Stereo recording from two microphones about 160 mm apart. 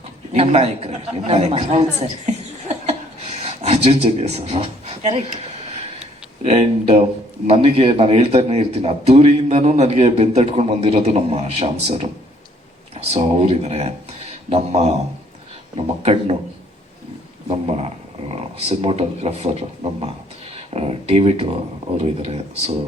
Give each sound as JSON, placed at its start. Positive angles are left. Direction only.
{"t": 0.3, "sound": "a man's voice", "side_deg": -40}
{"t": 3.3, "sound": "speech", "side_deg": -40}
{"t": 6.4, "sound": "a man's voice", "side_deg": -45}
{"t": 13.1, "sound": "speech", "side_deg": -40}
{"t": 17.5, "sound": "a man's voice", "side_deg": -40}